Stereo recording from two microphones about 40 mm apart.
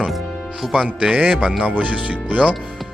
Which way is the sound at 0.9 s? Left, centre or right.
Right.